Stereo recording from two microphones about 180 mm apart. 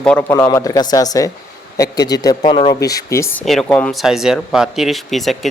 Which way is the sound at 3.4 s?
Centre (ahead or behind).